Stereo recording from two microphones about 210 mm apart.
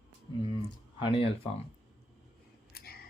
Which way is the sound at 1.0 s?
25° left (ahead or behind).